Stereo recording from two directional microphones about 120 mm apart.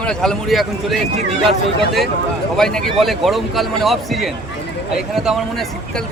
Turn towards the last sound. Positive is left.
turn(degrees=0)  # may be behind; listen again after turning